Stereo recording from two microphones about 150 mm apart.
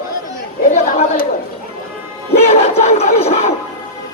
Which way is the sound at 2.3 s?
45° left (ahead or behind).